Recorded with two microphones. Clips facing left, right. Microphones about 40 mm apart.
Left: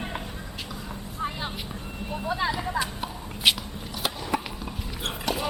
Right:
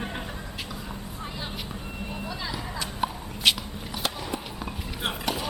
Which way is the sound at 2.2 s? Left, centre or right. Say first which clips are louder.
Left 10 dB; left.